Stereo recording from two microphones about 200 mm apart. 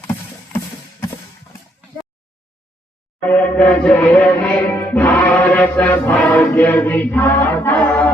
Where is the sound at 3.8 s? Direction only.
5° left (ahead or behind).